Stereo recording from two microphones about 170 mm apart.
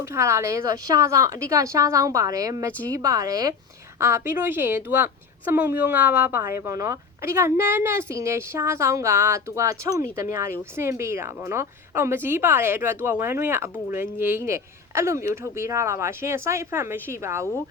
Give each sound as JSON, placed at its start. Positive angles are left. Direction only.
{"t": 0.0, "sound": "a woman's voice", "side_deg": -15}